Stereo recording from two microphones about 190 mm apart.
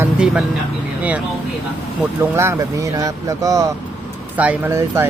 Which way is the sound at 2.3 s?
15° right (ahead or behind).